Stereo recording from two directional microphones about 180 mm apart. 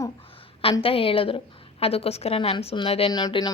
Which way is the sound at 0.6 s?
30° left (ahead or behind).